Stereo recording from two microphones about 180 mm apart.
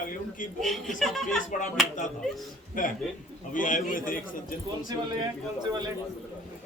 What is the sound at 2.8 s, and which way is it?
A man's voice, 50° left (ahead or behind).